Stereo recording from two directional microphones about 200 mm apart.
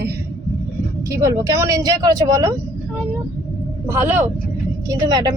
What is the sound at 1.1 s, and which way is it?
Speech, 15° right (ahead or behind).